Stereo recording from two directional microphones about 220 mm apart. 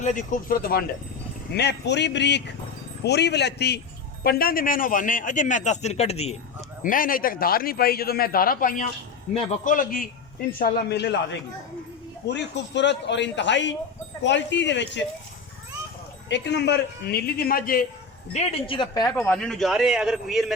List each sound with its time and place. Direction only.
0.0 s a man's voice: 35° left (ahead or behind)
10.6 s a man's voice: 50° left (ahead or behind)
16.3 s a man's voice: 50° left (ahead or behind)
18.3 s speech: 25° left (ahead or behind)
19.1 s speech: 5° left (ahead or behind)